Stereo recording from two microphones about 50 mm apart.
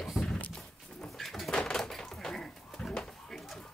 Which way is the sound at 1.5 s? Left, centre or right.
Centre.